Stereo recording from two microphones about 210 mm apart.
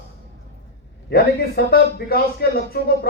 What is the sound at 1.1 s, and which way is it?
A man's voice, 45° left (ahead or behind).